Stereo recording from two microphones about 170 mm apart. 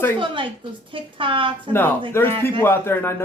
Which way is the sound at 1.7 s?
10° left (ahead or behind).